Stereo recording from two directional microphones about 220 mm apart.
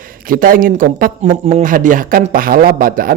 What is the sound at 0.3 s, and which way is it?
Speech, 40° right (ahead or behind).